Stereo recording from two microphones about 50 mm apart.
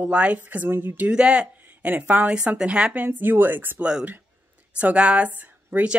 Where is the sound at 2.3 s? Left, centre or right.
Right.